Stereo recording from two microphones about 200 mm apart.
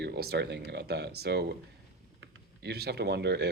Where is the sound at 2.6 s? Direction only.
55° right (ahead or behind).